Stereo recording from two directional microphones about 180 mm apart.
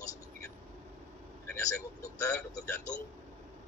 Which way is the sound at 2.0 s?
15° left (ahead or behind).